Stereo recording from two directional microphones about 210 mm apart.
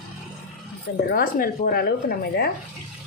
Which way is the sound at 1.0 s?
45° left (ahead or behind).